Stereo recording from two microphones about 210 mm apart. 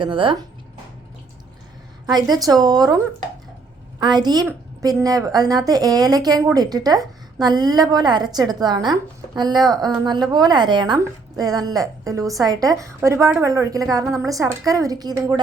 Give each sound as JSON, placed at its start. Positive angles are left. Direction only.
{"t": 0.0, "sound": "a woman's voice", "side_deg": -25}
{"t": 2.0, "sound": "a woman's voice", "side_deg": -20}
{"t": 4.0, "sound": "a woman's voice", "side_deg": -20}